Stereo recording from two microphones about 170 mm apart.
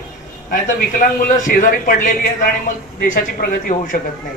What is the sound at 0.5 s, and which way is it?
A man's voice, 50° left (ahead or behind).